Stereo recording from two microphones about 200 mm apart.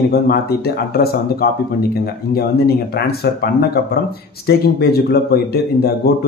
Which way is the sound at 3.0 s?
50° left (ahead or behind).